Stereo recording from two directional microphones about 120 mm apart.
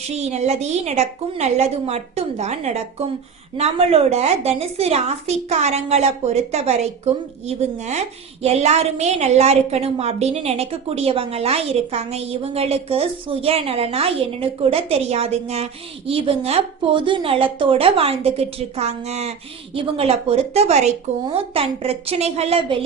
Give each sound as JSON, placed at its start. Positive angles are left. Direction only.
{"t": 0.1, "sound": "a woman's voice", "side_deg": -65}
{"t": 19.7, "sound": "a woman's voice", "side_deg": -50}
{"t": 21.3, "sound": "a woman's voice", "side_deg": -50}